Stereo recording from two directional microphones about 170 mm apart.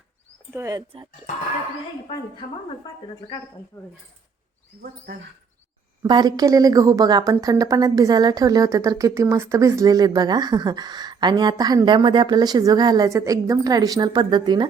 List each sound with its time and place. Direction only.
0.5 s a woman's voice: 20° right (ahead or behind)
2.8 s speech: 25° left (ahead or behind)
6.0 s a woman's voice: 25° right (ahead or behind)